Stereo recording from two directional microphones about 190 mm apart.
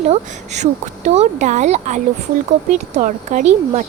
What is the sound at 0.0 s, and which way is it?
Speech, 35° right (ahead or behind).